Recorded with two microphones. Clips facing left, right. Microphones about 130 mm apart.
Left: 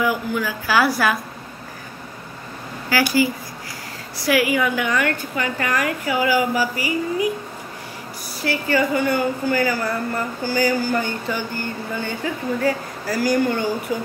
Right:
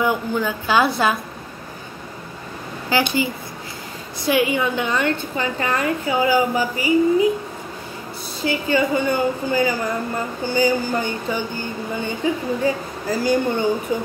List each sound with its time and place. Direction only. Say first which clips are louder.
0.0 s a woman's voice: right 1 dB; 25° right (ahead or behind)
2.9 s a woman's voice: left 1 dB; 20° right (ahead or behind)
8.4 s a woman's voice: right 1 dB; 20° right (ahead or behind)